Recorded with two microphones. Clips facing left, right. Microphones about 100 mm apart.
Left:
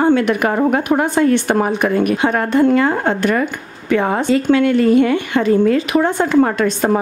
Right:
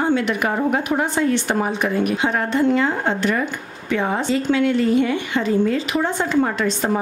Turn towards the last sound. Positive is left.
turn(degrees=55)  # may be behind; listen again after turning